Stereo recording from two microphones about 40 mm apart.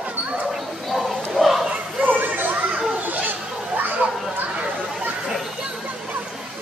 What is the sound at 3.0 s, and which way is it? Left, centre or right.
Chatter, right.